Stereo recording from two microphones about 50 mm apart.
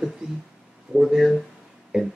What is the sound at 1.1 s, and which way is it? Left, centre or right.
Speech, centre.